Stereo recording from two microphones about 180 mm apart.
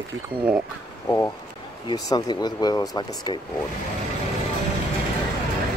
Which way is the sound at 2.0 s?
20° left (ahead or behind).